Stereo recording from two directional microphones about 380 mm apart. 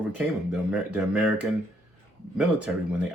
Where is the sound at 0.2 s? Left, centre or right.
Centre.